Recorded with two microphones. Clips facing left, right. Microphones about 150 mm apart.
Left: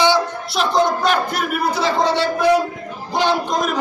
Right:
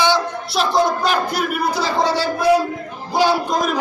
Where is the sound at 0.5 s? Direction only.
Centre (ahead or behind).